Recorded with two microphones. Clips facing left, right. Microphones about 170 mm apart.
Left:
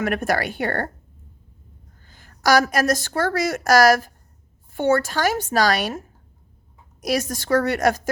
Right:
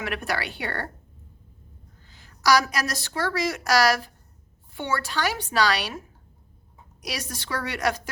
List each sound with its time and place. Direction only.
0.0 s a woman's voice: 45° left (ahead or behind)
2.0 s a woman's voice: 50° left (ahead or behind)